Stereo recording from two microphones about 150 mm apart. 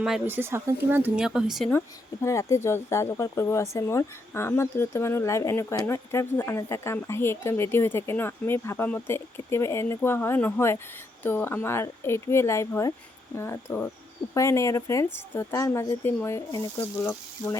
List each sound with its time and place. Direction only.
0.3 s speech: 15° right (ahead or behind)
2.2 s speech: 20° left (ahead or behind)